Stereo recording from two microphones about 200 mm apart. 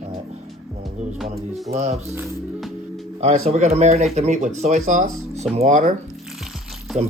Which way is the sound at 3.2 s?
35° right (ahead or behind).